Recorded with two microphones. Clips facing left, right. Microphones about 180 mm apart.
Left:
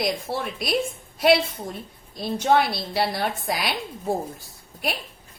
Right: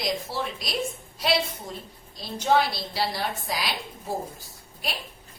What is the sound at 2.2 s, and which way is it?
A woman's voice, 55° left (ahead or behind).